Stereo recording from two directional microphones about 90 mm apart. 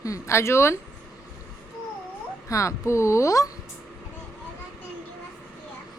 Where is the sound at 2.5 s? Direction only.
35° left (ahead or behind).